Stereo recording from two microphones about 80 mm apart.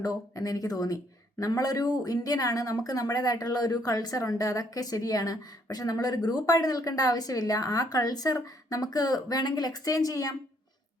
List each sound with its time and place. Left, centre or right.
0.0 s speech: left